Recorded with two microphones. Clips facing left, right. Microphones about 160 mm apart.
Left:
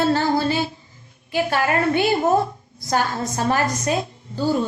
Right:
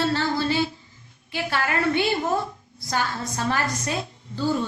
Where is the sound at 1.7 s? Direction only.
45° left (ahead or behind).